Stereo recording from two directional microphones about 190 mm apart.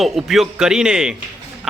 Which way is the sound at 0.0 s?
Centre (ahead or behind).